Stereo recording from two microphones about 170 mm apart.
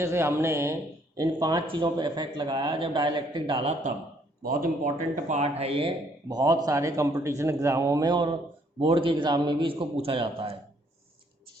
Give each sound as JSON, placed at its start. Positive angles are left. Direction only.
{"t": 0.0, "sound": "a man's voice", "side_deg": -15}
{"t": 4.4, "sound": "a man's voice", "side_deg": -55}
{"t": 6.2, "sound": "a man's voice", "side_deg": -20}